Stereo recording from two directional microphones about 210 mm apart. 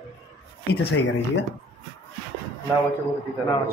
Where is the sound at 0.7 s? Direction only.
55° left (ahead or behind).